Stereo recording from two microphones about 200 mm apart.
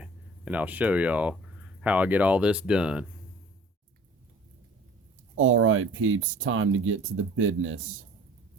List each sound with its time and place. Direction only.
0.0 s speech: 5° right (ahead or behind)
5.4 s speech: 90° right